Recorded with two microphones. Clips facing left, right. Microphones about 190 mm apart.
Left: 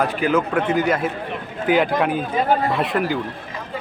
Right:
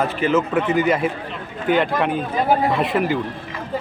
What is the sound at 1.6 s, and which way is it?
A man's voice, 5° left (ahead or behind).